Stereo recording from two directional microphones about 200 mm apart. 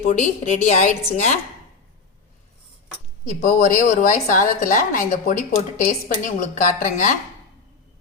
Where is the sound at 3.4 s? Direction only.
40° left (ahead or behind).